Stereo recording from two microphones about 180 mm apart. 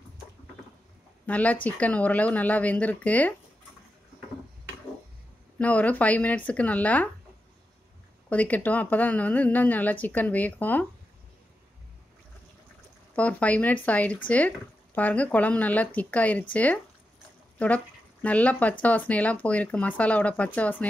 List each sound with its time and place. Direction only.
1.2 s speech: 10° left (ahead or behind)
5.6 s speech: 10° left (ahead or behind)
8.3 s speech: 10° left (ahead or behind)
13.1 s speech: 10° left (ahead or behind)